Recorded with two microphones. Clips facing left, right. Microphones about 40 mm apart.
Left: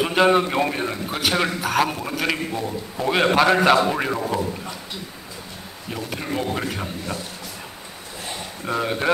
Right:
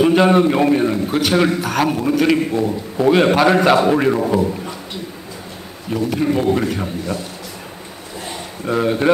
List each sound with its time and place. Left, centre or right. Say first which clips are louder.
0.0 s a man's voice: right 5 dB; centre
2.5 s a man's voice: right 8 dB; centre
3.1 s a man's voice: right 4 dB; centre
4.2 s a man's voice: right 7 dB; right
6.0 s a man's voice: right 9 dB; centre
8.6 s a man's voice: right 6 dB; centre